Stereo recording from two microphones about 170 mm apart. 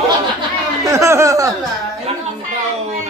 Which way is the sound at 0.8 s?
15° right (ahead or behind).